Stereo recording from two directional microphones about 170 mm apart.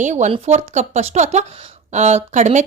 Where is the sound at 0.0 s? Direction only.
45° right (ahead or behind).